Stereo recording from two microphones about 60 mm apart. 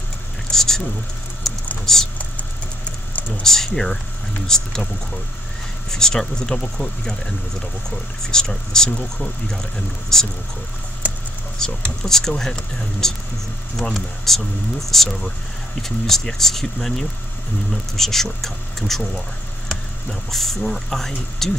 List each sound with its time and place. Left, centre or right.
0.5 s speech: centre
1.9 s speech: centre
3.1 s a sound: left
3.4 s speech: centre
5.9 s speech: centre
11.5 s speech: centre
20.1 s speech: centre